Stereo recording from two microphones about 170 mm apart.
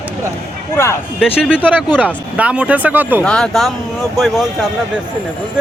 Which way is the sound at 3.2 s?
5° left (ahead or behind).